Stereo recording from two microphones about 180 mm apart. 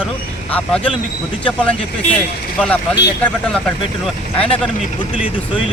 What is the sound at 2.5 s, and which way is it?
Speech, 5° left (ahead or behind).